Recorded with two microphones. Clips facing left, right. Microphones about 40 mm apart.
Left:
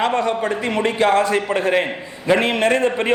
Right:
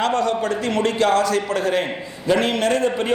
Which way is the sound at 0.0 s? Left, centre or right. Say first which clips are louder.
Left 1 dB; left.